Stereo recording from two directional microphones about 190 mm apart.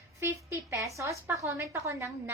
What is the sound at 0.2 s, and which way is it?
A woman's voice, 15° right (ahead or behind).